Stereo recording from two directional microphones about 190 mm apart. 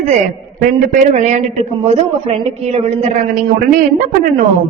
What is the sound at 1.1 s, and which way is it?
Speech, 35° right (ahead or behind).